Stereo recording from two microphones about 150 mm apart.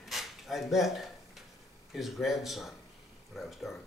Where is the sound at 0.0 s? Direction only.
Centre (ahead or behind).